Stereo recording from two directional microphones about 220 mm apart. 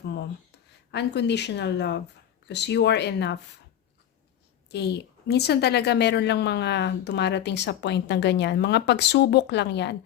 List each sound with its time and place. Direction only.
0.0 s a sound: 50° left (ahead or behind)
0.9 s a woman's voice: 50° left (ahead or behind)
4.7 s a woman's voice: 50° left (ahead or behind)